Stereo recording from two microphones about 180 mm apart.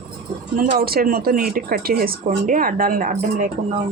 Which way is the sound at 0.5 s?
45° right (ahead or behind).